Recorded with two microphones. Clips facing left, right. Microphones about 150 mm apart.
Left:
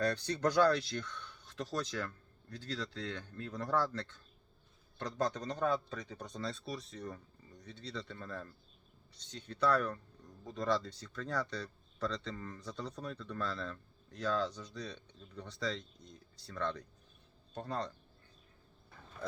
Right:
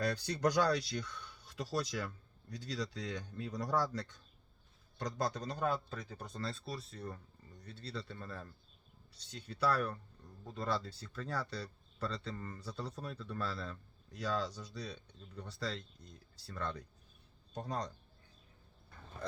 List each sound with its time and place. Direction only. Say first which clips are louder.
0.0 s speech: left 1 dB; 10° right (ahead or behind)